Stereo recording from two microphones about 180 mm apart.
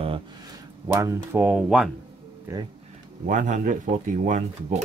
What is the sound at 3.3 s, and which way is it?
Speech, 45° right (ahead or behind).